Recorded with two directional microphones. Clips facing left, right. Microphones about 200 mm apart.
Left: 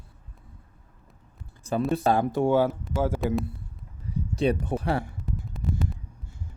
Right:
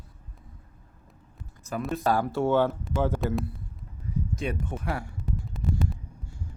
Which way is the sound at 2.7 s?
5° left (ahead or behind).